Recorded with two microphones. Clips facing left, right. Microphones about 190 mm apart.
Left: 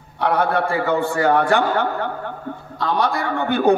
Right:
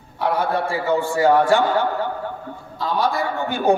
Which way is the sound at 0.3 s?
60° left (ahead or behind).